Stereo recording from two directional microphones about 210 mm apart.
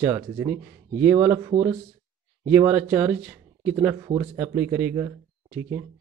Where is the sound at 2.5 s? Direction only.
10° right (ahead or behind).